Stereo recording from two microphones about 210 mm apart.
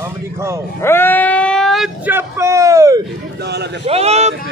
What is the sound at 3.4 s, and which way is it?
Speech, 50° right (ahead or behind).